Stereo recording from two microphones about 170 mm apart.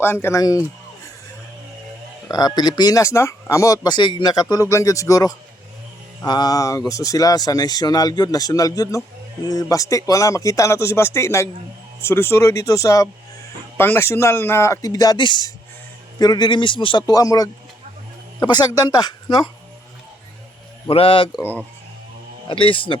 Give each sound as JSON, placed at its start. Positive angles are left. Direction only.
{"t": 0.0, "sound": "speech", "side_deg": 15}
{"t": 2.2, "sound": "speech", "side_deg": 25}
{"t": 20.8, "sound": "a man's voice", "side_deg": 35}
{"t": 22.4, "sound": "a man's voice", "side_deg": 30}